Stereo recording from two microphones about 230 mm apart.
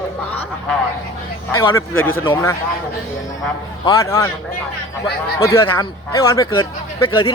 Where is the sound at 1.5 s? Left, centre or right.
Centre.